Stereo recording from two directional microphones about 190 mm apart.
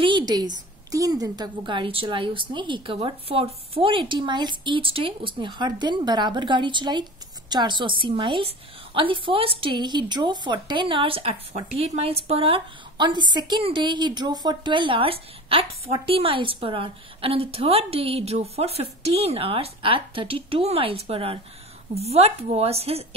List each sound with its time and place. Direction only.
0.0 s a woman's voice: 25° right (ahead or behind)